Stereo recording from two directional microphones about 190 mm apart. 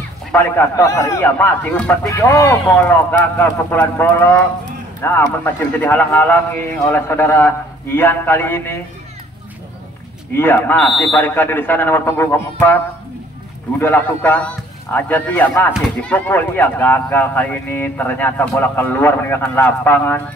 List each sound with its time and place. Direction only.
0.3 s speech: 10° left (ahead or behind)
10.3 s speech: 10° left (ahead or behind)